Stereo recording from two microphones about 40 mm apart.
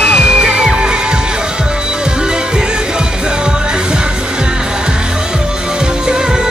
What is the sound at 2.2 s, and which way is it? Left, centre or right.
Music, centre.